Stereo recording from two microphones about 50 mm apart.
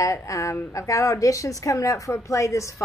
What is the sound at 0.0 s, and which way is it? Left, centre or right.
A woman's voice, left.